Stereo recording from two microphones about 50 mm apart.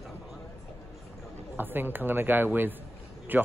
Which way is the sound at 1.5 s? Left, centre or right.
Right.